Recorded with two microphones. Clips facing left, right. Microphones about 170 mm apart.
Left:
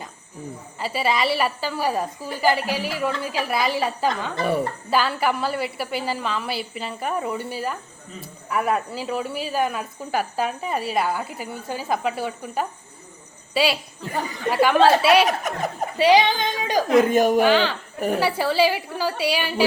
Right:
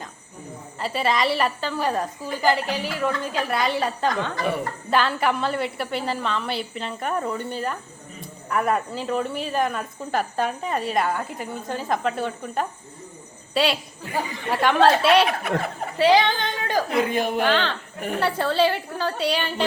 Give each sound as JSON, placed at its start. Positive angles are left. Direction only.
{"t": 0.8, "sound": "a woman's voice", "side_deg": 5}
{"t": 15.3, "sound": "speech", "side_deg": 40}
{"t": 16.0, "sound": "a woman's voice", "side_deg": 15}
{"t": 16.9, "sound": "a woman's voice", "side_deg": 45}
{"t": 17.3, "sound": "a woman's voice", "side_deg": 10}